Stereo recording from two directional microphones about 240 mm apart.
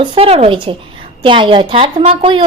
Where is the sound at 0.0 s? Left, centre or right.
Right.